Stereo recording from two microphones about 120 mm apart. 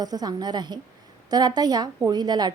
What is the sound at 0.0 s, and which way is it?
A woman's voice, 35° right (ahead or behind).